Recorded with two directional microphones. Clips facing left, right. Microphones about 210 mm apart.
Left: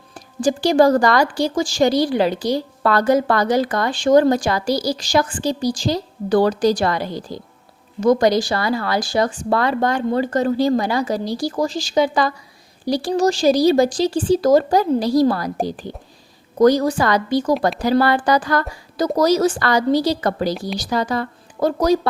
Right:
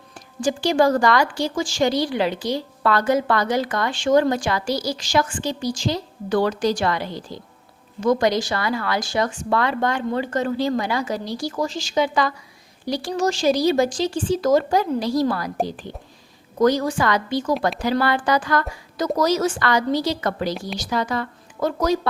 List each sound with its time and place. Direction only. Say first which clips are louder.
0.1 s a woman's voice: left 4 dB; 40° left (ahead or behind)